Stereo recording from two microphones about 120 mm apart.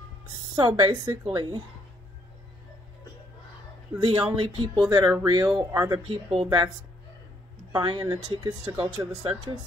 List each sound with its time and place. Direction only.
0.6 s speech: 40° right (ahead or behind)
4.0 s speech: 45° right (ahead or behind)
5.9 s speech: 50° right (ahead or behind)
7.7 s speech: 40° right (ahead or behind)